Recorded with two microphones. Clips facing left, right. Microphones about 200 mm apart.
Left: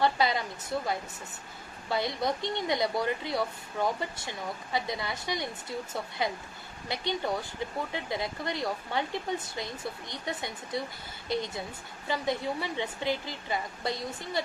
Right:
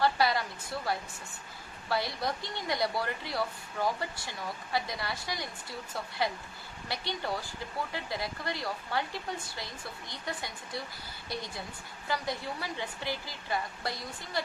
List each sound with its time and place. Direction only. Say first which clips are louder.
0.0 s speech: left 1 dB; 20° left (ahead or behind)
1.9 s speech: left 3 dB; 20° left (ahead or behind)